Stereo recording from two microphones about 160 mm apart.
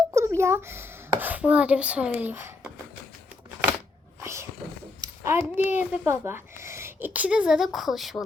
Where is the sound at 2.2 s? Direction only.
15° right (ahead or behind).